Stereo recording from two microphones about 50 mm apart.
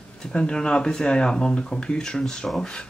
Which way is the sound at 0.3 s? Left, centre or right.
Centre.